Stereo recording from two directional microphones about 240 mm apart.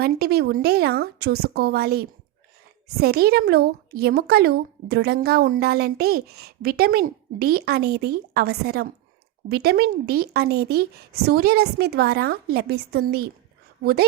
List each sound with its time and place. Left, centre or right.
0.0 s a woman's voice: right